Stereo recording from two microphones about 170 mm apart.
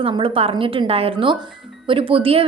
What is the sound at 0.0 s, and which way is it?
A woman's voice, 30° right (ahead or behind).